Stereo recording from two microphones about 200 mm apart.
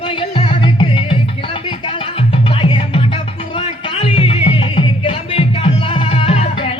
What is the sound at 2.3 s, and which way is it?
Music, 25° left (ahead or behind).